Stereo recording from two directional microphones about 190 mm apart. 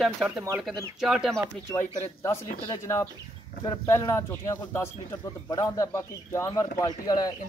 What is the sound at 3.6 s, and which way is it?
A man's voice, 20° left (ahead or behind).